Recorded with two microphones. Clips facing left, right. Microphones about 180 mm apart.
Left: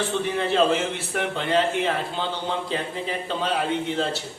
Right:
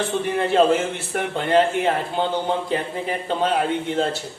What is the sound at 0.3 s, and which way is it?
A man's voice, 50° right (ahead or behind).